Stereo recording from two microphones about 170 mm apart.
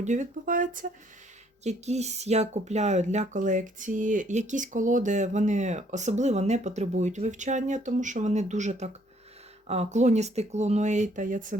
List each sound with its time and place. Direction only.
0.0 s speech: 45° right (ahead or behind)